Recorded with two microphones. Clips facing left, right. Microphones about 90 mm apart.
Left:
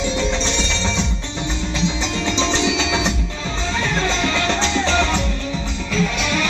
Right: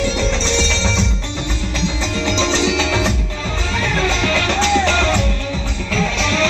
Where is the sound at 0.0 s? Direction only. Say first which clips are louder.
Right 2 dB; 20° left (ahead or behind).